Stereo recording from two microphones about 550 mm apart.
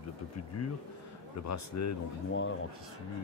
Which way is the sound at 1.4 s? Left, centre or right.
Left.